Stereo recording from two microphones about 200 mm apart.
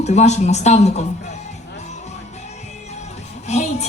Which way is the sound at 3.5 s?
35° left (ahead or behind).